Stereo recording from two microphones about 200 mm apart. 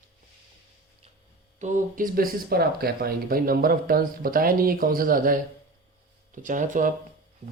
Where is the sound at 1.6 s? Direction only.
40° right (ahead or behind).